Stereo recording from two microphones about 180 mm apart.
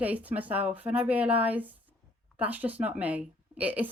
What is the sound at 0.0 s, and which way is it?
A woman's voice, 10° right (ahead or behind).